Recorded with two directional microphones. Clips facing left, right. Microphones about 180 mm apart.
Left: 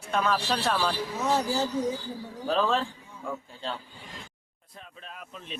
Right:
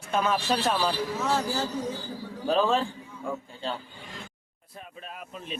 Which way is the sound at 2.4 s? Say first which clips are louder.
Right 2 dB; 5° right (ahead or behind).